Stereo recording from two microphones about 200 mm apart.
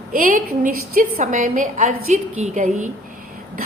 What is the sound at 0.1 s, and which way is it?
A woman's voice, 45° right (ahead or behind).